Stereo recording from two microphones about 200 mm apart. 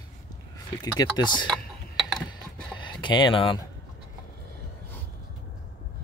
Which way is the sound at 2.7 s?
25° left (ahead or behind).